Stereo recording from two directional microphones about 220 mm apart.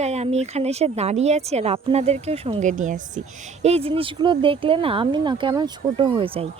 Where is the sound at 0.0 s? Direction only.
30° right (ahead or behind).